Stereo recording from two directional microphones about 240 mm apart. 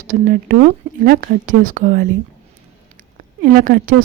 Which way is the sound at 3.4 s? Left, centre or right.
Right.